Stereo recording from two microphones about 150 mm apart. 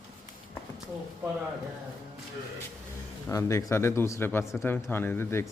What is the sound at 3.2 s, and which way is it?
A man's voice, 20° left (ahead or behind).